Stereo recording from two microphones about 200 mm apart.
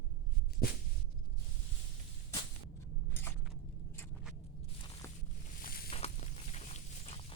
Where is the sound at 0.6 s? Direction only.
50° left (ahead or behind).